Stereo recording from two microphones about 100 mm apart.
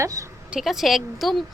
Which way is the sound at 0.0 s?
35° right (ahead or behind).